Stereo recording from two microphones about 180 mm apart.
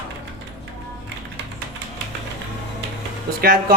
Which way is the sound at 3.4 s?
60° right (ahead or behind).